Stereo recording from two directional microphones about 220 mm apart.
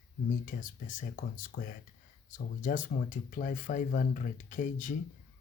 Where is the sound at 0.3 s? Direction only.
35° left (ahead or behind).